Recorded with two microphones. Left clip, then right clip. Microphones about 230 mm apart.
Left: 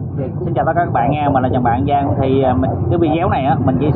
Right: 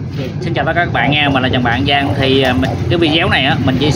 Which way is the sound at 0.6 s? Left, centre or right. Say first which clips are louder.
Right 1 dB; right.